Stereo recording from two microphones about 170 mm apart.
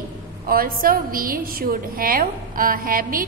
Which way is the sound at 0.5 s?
60° right (ahead or behind).